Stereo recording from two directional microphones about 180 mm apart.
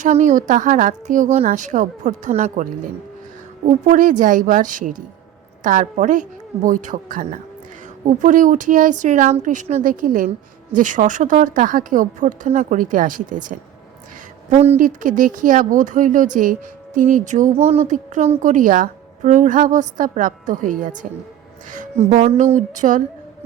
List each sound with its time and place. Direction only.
0.0 s speech: 40° right (ahead or behind)
3.7 s speech: 45° right (ahead or behind)